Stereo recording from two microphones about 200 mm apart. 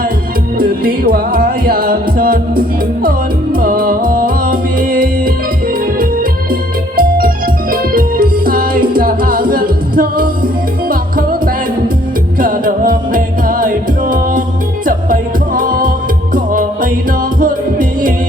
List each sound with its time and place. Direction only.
0.6 s music: 45° right (ahead or behind)
6.5 s organ: 45° right (ahead or behind)
12.4 s music: 45° right (ahead or behind)